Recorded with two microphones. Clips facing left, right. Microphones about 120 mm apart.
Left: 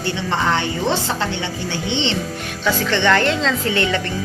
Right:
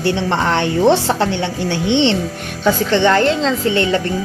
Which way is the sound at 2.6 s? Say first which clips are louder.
Right 4 dB; 35° right (ahead or behind).